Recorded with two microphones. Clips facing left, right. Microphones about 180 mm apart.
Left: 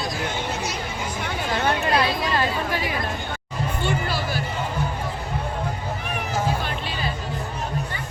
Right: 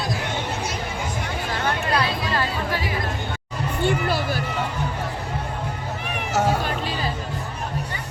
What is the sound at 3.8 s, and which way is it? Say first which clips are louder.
Music: right 5 dB; 55° right (ahead or behind).